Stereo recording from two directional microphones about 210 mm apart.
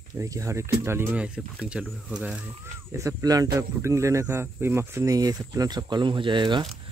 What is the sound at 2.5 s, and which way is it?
Speech, 15° right (ahead or behind).